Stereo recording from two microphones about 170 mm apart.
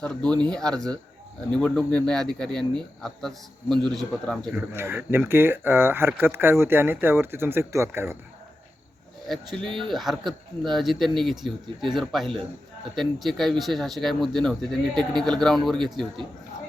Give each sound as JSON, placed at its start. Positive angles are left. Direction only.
{"t": 0.2, "sound": "speech", "side_deg": -25}
{"t": 0.5, "sound": "speech", "side_deg": 5}
{"t": 4.7, "sound": "speech", "side_deg": -15}
{"t": 9.2, "sound": "speech", "side_deg": 0}